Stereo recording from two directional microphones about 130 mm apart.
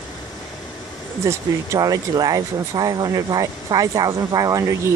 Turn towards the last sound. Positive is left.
turn(degrees=-25)  # may be behind; listen again after turning